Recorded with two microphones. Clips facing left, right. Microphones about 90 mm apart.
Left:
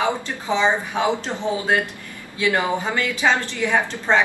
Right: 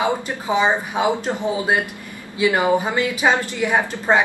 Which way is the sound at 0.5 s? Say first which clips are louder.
Right 1 dB; 10° right (ahead or behind).